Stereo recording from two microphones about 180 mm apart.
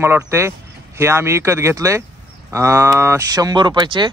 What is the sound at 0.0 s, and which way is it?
Speech, 15° right (ahead or behind).